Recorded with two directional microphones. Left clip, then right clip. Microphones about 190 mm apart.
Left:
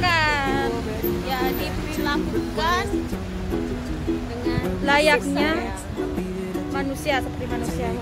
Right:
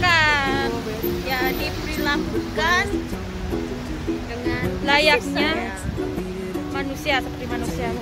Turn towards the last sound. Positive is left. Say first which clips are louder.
# right 1 dB
turn(degrees=20)  # may be behind; listen again after turning